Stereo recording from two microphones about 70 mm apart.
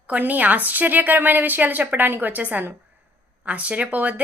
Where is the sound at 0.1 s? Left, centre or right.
Right.